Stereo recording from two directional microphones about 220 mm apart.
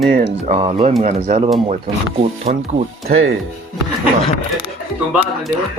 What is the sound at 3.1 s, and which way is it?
Speech, 65° right (ahead or behind).